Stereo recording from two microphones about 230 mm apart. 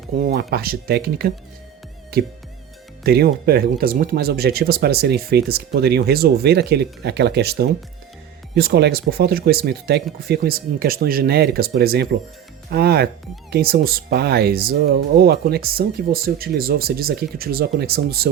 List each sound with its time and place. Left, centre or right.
0.2 s speech: right
3.0 s speech: right